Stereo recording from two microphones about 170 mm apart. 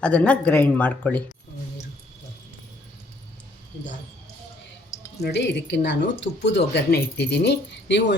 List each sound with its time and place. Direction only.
0.0 s speech: 5° left (ahead or behind)
5.2 s speech: 90° left